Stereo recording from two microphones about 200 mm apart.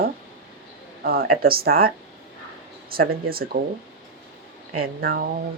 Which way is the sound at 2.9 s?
50° right (ahead or behind).